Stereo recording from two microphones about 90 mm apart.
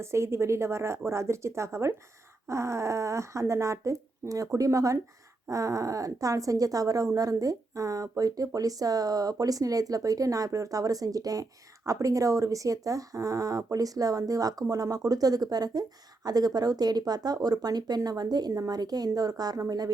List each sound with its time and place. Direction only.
0.0 s a woman's voice: 30° right (ahead or behind)